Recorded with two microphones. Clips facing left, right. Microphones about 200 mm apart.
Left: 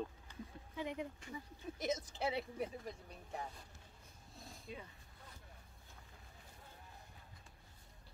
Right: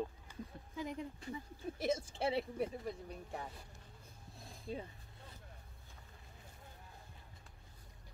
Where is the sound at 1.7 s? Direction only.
30° right (ahead or behind).